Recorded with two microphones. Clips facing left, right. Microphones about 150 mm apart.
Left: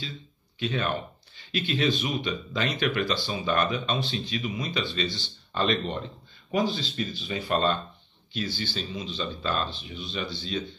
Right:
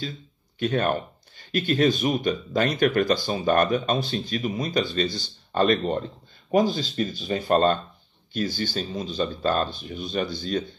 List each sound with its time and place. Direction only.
0.6 s speech: 50° right (ahead or behind)